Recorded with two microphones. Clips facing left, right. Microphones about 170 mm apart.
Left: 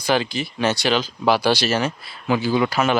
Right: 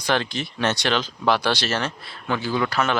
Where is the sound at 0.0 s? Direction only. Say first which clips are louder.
Left 3 dB; 5° left (ahead or behind).